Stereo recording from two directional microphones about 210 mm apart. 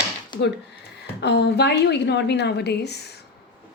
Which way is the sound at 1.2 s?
55° left (ahead or behind).